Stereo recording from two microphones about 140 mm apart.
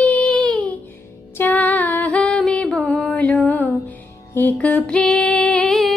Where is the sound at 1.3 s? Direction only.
10° left (ahead or behind).